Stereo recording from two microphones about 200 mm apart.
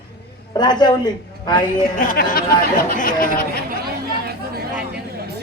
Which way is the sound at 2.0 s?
45° left (ahead or behind).